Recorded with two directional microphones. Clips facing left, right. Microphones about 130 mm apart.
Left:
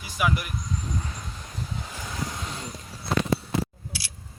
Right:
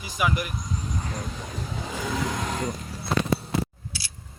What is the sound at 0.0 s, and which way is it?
Speech, centre (ahead or behind).